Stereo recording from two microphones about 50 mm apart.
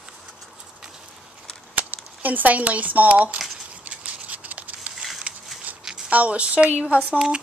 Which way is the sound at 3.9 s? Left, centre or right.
Right.